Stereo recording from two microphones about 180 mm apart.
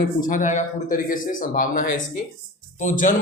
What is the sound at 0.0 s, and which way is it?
Speech, 50° left (ahead or behind).